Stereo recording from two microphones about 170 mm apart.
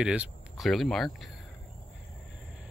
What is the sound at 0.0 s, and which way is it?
Speech, 5° right (ahead or behind).